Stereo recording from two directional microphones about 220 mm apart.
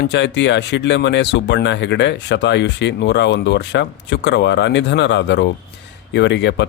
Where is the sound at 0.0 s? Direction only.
50° left (ahead or behind).